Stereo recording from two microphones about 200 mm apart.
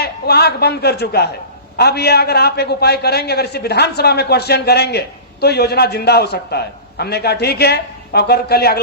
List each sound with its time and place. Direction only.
0.0 s a man's voice: 55° left (ahead or behind)